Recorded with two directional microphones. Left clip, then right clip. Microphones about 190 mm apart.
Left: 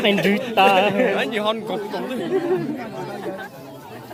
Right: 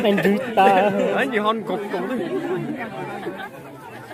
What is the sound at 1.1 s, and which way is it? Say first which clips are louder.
Speech: right 1 dB; 45° right (ahead or behind).